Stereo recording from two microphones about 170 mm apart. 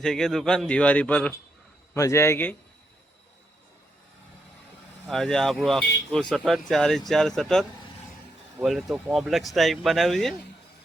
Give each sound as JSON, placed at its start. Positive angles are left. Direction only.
{"t": 0.0, "sound": "speech", "side_deg": 0}
{"t": 5.0, "sound": "speech", "side_deg": 0}
{"t": 8.6, "sound": "speech", "side_deg": 0}